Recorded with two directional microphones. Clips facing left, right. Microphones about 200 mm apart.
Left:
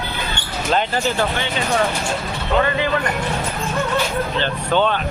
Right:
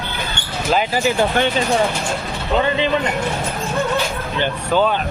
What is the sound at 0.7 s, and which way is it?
Speech, 10° right (ahead or behind).